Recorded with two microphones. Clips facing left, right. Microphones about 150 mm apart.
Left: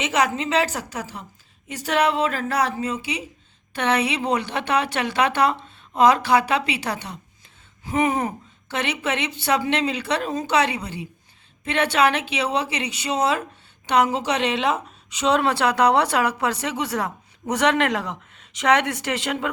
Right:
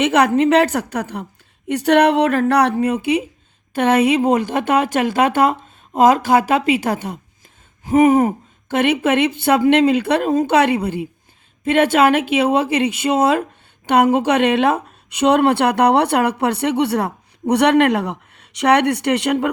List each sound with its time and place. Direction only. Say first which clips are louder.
0.0 s a woman's voice: right 8 dB; 60° right (ahead or behind)